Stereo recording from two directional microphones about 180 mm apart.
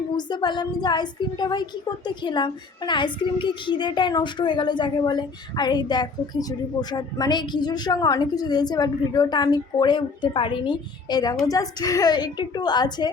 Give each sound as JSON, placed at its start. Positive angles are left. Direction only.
{"t": 0.2, "sound": "a woman's voice", "side_deg": 25}